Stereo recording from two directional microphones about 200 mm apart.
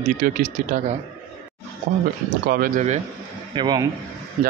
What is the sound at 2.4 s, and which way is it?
Speech, 45° right (ahead or behind).